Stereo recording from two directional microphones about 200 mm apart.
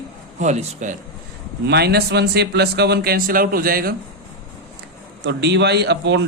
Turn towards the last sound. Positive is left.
turn(degrees=-60)  # may be behind; listen again after turning